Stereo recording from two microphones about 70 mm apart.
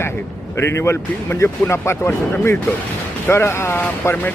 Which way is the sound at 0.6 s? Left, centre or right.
Left.